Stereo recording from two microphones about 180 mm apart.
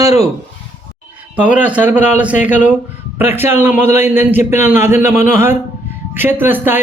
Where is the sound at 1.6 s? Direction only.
10° right (ahead or behind).